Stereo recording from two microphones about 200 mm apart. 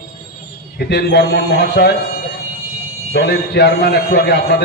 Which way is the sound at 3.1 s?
55° left (ahead or behind).